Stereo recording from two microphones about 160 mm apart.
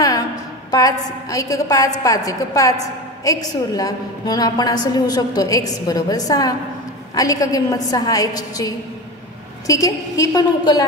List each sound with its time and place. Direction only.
0.7 s a woman's voice: 20° left (ahead or behind)